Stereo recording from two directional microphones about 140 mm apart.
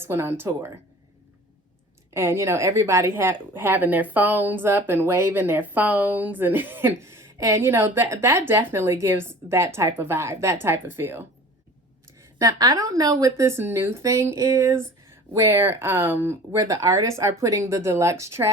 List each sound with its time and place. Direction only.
0.0 s speech: 15° right (ahead or behind)
2.1 s speech: 20° right (ahead or behind)
12.4 s a woman's voice: 25° right (ahead or behind)